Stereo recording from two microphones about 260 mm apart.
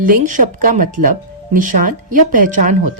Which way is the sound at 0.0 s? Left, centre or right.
Right.